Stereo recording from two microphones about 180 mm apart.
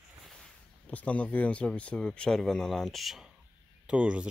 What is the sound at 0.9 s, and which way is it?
Speech, 10° left (ahead or behind).